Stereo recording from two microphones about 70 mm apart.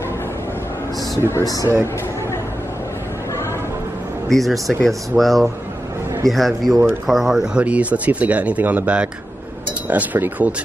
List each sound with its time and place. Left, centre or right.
1.4 s speech: left
4.3 s speech: centre
7.5 s speech: centre